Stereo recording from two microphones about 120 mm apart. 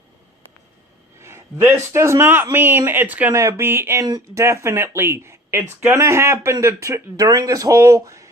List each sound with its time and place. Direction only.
1.2 s a man's voice: 20° right (ahead or behind)
4.0 s speech: 35° right (ahead or behind)
4.4 s a man's voice: 25° right (ahead or behind)